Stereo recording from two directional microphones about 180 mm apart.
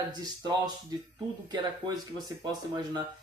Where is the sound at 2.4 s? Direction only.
25° right (ahead or behind).